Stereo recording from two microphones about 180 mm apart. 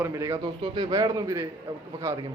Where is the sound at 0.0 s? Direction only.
15° right (ahead or behind).